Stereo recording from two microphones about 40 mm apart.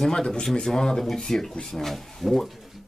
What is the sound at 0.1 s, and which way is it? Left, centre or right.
Speech, centre.